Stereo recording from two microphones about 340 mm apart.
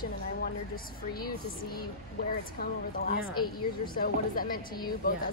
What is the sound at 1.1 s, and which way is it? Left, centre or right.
A woman's voice, left.